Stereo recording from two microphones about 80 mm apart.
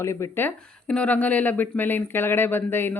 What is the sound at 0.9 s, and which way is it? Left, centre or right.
Speech, centre.